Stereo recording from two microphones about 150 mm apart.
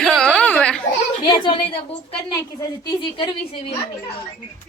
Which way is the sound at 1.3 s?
35° left (ahead or behind).